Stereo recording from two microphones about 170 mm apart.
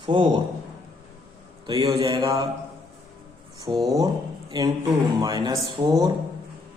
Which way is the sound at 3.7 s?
30° right (ahead or behind).